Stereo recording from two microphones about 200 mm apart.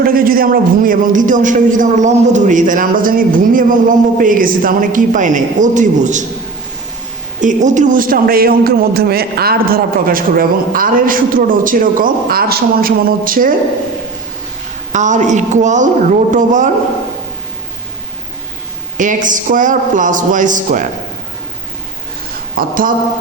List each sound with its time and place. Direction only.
0.0 s a man's voice: 45° right (ahead or behind)
7.4 s a man's voice: 40° right (ahead or behind)
14.9 s a man's voice: 40° right (ahead or behind)
18.9 s a man's voice: 40° right (ahead or behind)
22.5 s a man's voice: 45° right (ahead or behind)